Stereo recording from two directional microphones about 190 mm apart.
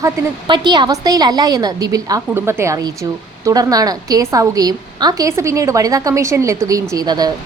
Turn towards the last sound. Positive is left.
turn(degrees=-20)  # may be behind; listen again after turning